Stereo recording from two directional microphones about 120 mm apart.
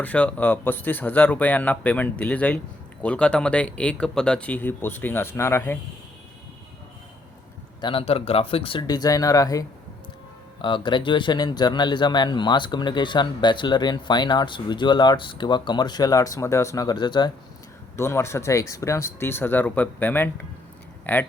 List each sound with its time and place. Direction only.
0.0 s speech: 10° left (ahead or behind)
7.8 s a man's voice: 45° left (ahead or behind)
8.9 s speech: 30° left (ahead or behind)
10.6 s speech: 40° left (ahead or behind)
17.9 s speech: 20° left (ahead or behind)